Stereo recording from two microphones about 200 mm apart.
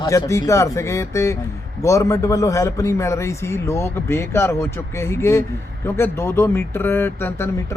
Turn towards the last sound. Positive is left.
turn(degrees=10)  # may be behind; listen again after turning